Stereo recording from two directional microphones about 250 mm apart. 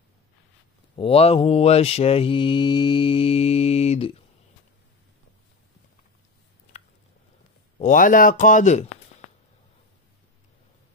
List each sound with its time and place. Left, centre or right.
0.9 s mantra: left
7.8 s speech: left